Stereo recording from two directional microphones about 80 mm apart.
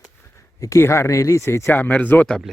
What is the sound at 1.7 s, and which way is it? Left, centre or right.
Speech, left.